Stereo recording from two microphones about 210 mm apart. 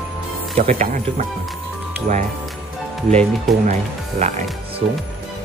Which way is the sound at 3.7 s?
35° right (ahead or behind).